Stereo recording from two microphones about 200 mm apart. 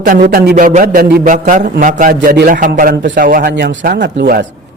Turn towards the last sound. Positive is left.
turn(degrees=-55)  # may be behind; listen again after turning